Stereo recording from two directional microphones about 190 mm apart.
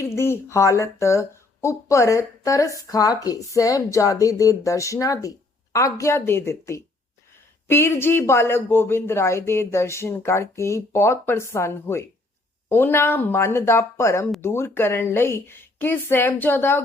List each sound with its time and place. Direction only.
0.0 s speech: 15° left (ahead or behind)